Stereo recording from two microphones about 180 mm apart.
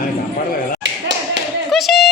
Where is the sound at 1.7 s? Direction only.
Centre (ahead or behind).